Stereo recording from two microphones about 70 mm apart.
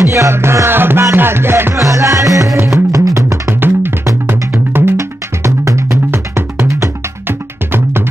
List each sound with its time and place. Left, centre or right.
0.0 s music: right
0.3 s music: right
1.8 s music: right
4.3 s music: right
4.9 s music: right
6.0 s music: right